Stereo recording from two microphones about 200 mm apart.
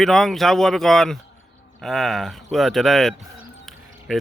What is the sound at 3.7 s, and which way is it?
Music, centre (ahead or behind).